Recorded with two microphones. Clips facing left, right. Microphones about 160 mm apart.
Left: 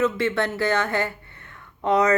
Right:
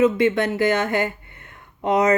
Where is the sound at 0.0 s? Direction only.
15° right (ahead or behind).